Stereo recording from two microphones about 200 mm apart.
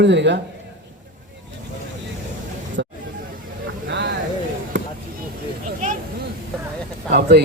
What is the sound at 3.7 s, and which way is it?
Vehicle, 60° right (ahead or behind).